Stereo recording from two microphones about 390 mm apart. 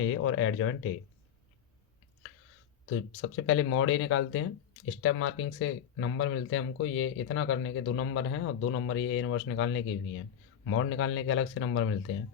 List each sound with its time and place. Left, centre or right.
0.0 s speech: left
2.9 s speech: left